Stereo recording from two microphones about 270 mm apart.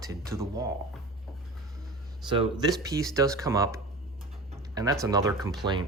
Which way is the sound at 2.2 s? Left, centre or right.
Centre.